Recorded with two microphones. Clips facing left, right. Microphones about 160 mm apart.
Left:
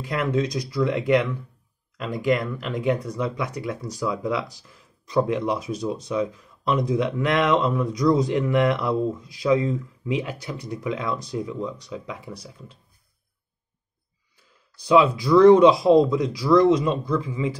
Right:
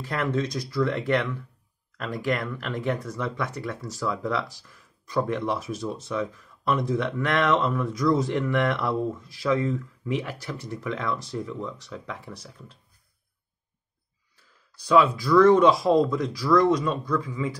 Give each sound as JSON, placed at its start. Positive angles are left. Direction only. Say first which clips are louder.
{"t": 0.0, "sound": "speech", "louder": "left 3 dB", "side_deg": 15}
{"t": 14.9, "sound": "speech", "louder": "left 2 dB", "side_deg": 20}